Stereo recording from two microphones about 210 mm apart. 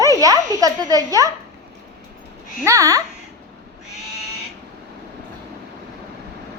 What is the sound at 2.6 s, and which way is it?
Speech, 15° right (ahead or behind).